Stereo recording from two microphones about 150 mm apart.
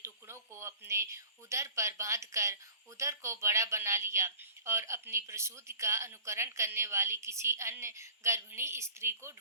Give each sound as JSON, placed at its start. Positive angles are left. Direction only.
{"t": 0.0, "sound": "speech", "side_deg": -20}